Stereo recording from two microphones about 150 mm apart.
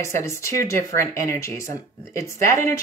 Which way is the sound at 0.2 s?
20° left (ahead or behind).